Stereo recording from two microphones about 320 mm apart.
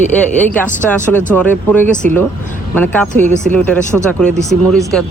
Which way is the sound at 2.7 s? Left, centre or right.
Centre.